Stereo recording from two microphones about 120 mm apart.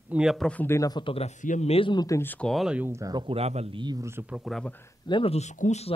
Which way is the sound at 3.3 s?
60° right (ahead or behind).